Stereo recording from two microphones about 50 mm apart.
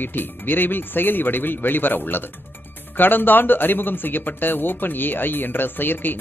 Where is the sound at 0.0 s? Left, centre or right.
Left.